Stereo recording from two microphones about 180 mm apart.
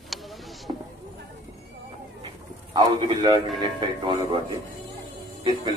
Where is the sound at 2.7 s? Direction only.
25° right (ahead or behind).